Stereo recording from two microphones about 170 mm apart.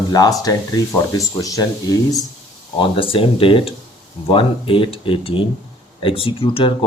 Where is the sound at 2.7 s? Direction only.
30° left (ahead or behind).